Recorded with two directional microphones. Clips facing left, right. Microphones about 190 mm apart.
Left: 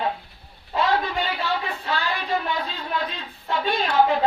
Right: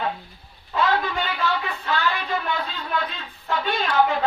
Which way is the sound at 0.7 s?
30° left (ahead or behind).